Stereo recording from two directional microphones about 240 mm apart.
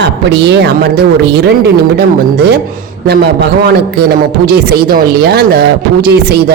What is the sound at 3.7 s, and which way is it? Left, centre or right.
Speech, right.